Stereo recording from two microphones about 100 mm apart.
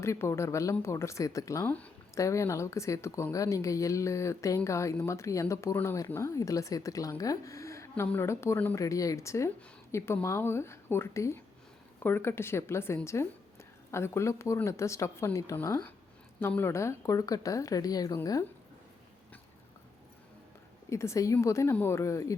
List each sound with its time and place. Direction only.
0.0 s a woman's voice: 30° left (ahead or behind)
1.6 s speech: 15° left (ahead or behind)
2.1 s a woman's voice: 30° left (ahead or behind)
16.4 s speech: 20° left (ahead or behind)
20.9 s a woman's voice: 30° left (ahead or behind)